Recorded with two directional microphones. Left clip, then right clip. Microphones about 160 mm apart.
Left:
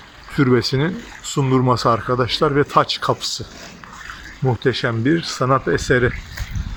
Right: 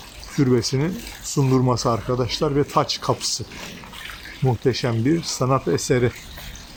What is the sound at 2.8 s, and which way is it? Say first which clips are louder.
Speech: left 4 dB; centre (ahead or behind).